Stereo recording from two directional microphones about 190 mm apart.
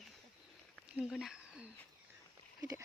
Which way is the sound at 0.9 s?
Centre (ahead or behind).